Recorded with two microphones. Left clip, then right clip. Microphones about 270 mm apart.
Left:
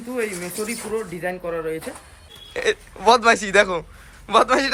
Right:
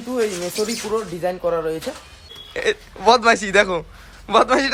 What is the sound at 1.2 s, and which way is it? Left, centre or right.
Speech, centre.